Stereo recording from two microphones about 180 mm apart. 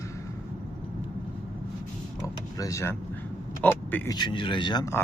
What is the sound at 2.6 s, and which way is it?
Speech, 15° left (ahead or behind).